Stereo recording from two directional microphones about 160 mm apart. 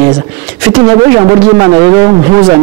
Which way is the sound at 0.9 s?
25° right (ahead or behind).